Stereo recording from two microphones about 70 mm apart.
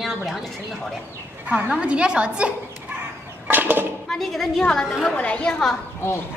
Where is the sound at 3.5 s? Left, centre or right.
Right.